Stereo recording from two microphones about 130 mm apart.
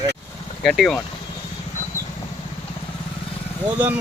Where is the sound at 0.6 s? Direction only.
Centre (ahead or behind).